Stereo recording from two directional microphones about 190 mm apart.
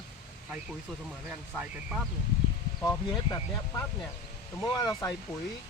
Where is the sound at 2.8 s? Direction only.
20° left (ahead or behind).